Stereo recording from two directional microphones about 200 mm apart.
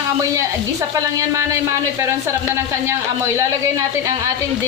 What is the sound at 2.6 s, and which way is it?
Speech, 15° right (ahead or behind).